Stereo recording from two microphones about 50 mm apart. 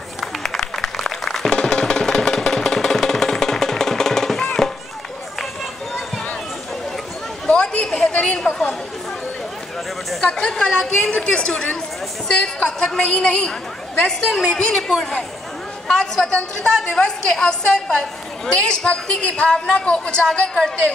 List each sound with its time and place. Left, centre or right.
0.2 s music: centre
7.4 s chatter: left
10.5 s a woman's voice: centre